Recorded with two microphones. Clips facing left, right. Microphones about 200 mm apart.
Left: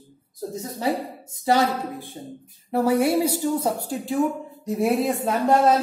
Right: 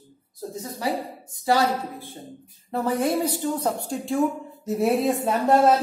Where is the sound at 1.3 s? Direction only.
20° left (ahead or behind); by 5.3 s centre (ahead or behind).